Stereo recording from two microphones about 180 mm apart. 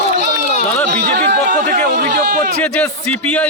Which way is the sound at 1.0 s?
55° right (ahead or behind).